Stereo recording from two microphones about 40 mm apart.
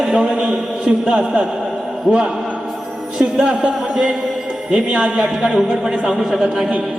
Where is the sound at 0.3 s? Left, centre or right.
Right.